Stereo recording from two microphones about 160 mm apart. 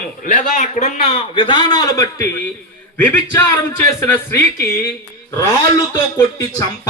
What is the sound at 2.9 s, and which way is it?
Speech, 10° left (ahead or behind).